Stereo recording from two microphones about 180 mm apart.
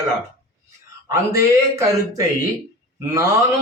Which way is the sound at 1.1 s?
15° right (ahead or behind).